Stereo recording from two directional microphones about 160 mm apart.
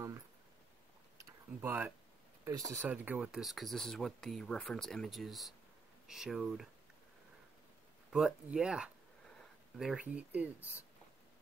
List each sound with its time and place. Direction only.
1.1 s a sound: 10° right (ahead or behind)
2.4 s speech: 20° right (ahead or behind)
2.9 s speech: 5° right (ahead or behind)
8.1 s speech: 5° right (ahead or behind)